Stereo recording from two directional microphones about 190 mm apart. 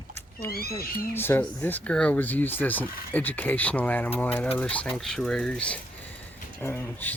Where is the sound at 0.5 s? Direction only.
55° left (ahead or behind).